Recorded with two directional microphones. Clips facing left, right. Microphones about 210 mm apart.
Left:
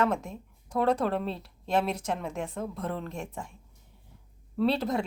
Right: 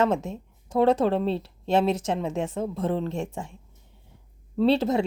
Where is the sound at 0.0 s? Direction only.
25° right (ahead or behind).